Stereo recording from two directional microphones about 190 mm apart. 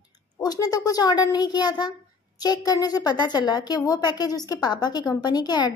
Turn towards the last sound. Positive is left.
turn(degrees=20)  # may be behind; listen again after turning